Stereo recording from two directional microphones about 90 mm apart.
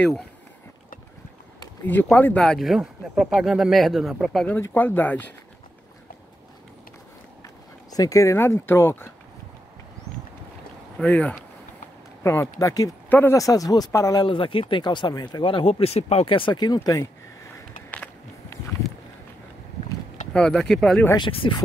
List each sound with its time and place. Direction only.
1.9 s speech: 20° left (ahead or behind)
2.4 s speech: centre (ahead or behind)
4.5 s speech: 25° left (ahead or behind)
7.9 s speech: 40° left (ahead or behind)
11.0 s speech: 15° left (ahead or behind)
12.2 s speech: 30° left (ahead or behind)
14.2 s speech: 75° left (ahead or behind); by 15.4 s 50° left (ahead or behind)
15.4 s speech: 85° left; by 17.1 s 40° left (ahead or behind)
17.5 s a sound: 25° left (ahead or behind)
20.3 s speech: 10° left (ahead or behind)
21.2 s speech: 75° left (ahead or behind)